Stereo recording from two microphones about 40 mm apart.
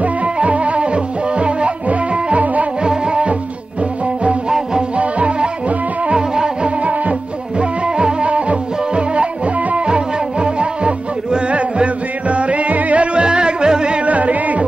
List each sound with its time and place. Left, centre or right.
0.0 s music: right
2.8 s music: right
4.5 s music: centre
4.9 s music: right
6.8 s music: right
14.0 s music: right